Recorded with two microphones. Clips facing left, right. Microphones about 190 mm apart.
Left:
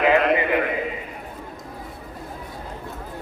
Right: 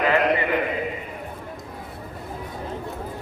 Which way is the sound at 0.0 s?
15° left (ahead or behind).